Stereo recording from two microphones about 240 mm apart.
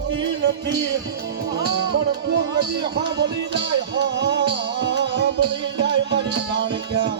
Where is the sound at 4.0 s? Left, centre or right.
Right.